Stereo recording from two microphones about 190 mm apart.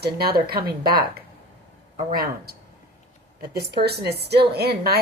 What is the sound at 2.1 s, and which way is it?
A woman's voice, 50° right (ahead or behind).